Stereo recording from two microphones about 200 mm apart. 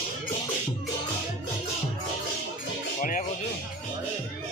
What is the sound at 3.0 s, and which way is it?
Music, 40° left (ahead or behind).